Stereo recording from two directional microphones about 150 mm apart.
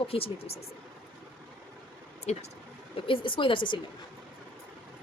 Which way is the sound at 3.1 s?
35° left (ahead or behind).